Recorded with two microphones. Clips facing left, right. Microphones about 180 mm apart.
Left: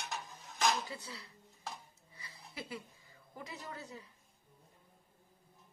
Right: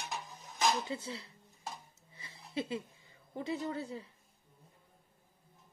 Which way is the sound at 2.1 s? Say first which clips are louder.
Right 10 dB; 25° right (ahead or behind).